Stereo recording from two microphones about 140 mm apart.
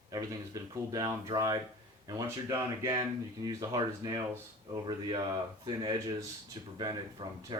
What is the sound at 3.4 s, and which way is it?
Speech, 30° right (ahead or behind).